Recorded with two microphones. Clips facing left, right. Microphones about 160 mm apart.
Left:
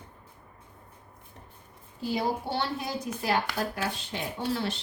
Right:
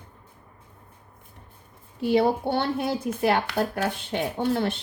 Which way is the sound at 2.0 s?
65° right (ahead or behind).